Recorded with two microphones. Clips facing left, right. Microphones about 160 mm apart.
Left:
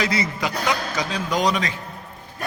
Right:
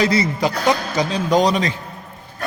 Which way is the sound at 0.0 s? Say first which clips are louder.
Right 6 dB; 30° right (ahead or behind).